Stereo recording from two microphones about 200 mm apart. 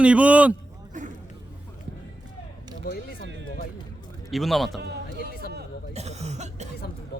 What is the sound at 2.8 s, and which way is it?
Speech, 50° left (ahead or behind).